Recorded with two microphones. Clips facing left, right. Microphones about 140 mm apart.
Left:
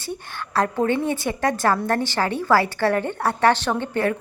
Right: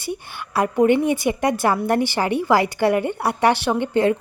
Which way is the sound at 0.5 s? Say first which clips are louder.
Right 4 dB; 10° right (ahead or behind).